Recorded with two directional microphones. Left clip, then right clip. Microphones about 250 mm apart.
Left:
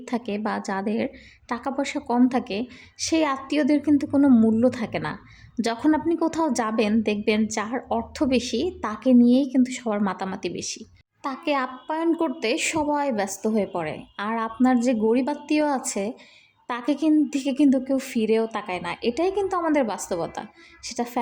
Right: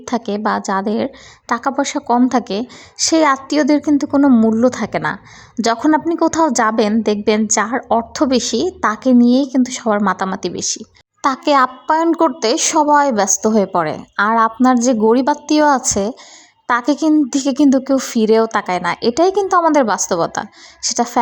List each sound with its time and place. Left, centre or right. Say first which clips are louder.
0.0 s a woman's voice: right 9 dB; centre